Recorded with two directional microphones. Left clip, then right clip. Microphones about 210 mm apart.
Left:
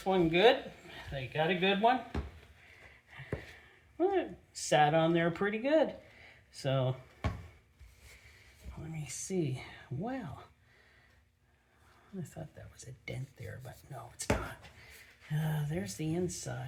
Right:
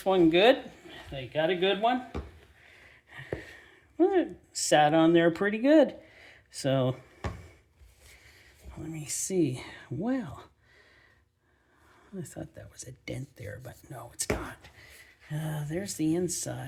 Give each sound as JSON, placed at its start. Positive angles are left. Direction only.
{"t": 0.0, "sound": "speech", "side_deg": -50}
{"t": 1.3, "sound": "speech", "side_deg": -30}
{"t": 3.6, "sound": "speech", "side_deg": -45}
{"t": 8.8, "sound": "speech", "side_deg": -45}
{"t": 12.2, "sound": "speech", "side_deg": -45}
{"t": 15.4, "sound": "speech", "side_deg": -40}